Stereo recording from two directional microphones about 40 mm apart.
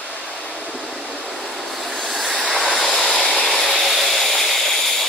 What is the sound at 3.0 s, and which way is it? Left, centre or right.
Vehicle, centre.